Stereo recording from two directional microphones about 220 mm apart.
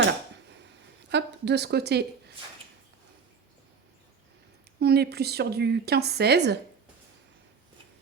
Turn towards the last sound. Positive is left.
turn(degrees=-50)  # may be behind; listen again after turning